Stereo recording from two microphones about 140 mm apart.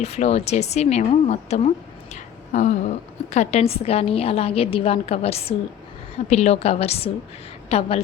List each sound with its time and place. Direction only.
0.0 s a woman's voice: 50° left (ahead or behind)
2.1 s a sound: 60° left (ahead or behind)
3.3 s a woman's voice: 50° left (ahead or behind)